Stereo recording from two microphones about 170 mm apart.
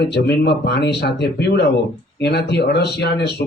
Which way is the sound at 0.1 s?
80° left.